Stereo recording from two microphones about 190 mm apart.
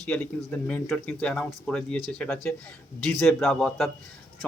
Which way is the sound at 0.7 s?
5° left (ahead or behind).